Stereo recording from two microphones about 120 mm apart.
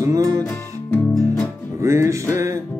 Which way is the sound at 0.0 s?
30° right (ahead or behind).